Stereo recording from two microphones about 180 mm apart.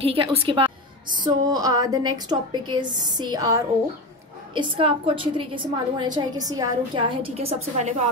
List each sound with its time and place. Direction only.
0.0 s a woman's voice: 30° right (ahead or behind)
1.2 s a woman's voice: 20° right (ahead or behind); by 8.1 s 40° right (ahead or behind)